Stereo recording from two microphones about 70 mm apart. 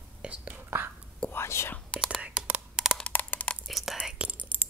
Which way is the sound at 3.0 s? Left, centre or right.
Left.